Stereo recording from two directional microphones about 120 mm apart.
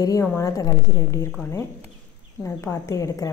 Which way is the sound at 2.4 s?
25° left (ahead or behind).